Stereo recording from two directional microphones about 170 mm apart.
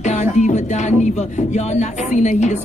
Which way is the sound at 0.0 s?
45° left (ahead or behind).